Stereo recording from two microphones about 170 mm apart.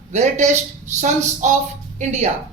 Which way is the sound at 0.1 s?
40° right (ahead or behind).